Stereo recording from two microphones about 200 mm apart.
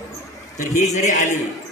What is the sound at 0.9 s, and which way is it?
Speech, 40° left (ahead or behind).